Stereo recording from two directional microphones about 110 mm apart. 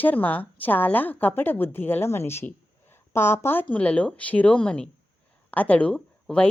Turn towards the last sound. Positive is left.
turn(degrees=10)  # may be behind; listen again after turning